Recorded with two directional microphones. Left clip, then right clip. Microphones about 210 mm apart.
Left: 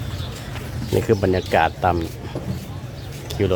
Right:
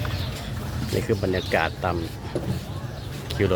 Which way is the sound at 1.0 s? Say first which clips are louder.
Left 6 dB; 30° left (ahead or behind).